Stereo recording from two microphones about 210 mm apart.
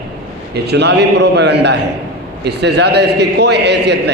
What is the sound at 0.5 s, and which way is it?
A man's voice, 55° right (ahead or behind).